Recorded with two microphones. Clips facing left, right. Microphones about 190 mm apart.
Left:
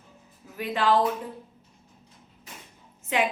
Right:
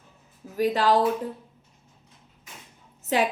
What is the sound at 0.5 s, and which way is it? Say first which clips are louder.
Speech: right 3 dB; 40° right (ahead or behind).